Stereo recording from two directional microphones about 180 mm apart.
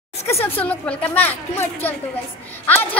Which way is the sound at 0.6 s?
10° left (ahead or behind).